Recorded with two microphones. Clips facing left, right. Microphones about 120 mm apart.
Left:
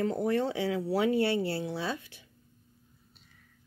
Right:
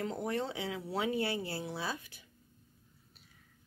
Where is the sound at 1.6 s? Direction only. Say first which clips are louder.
Left 5 dB; 30° left (ahead or behind).